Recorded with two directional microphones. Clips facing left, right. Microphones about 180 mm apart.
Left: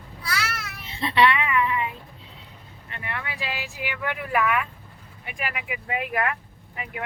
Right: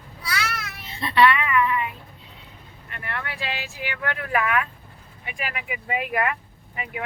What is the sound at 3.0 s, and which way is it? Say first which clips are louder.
Speech: right 1 dB; 15° left (ahead or behind).